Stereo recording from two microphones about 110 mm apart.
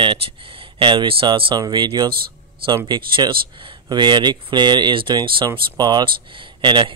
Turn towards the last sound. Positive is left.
turn(degrees=-45)  # may be behind; listen again after turning